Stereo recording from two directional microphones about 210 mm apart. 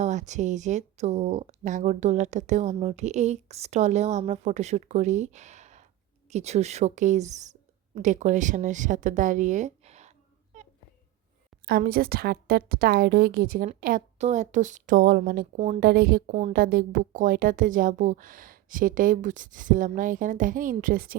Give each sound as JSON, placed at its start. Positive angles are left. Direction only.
{"t": 0.0, "sound": "speech", "side_deg": -35}
{"t": 11.6, "sound": "a woman's voice", "side_deg": -45}
{"t": 15.5, "sound": "speech", "side_deg": -30}
{"t": 15.8, "sound": "a woman's voice", "side_deg": -45}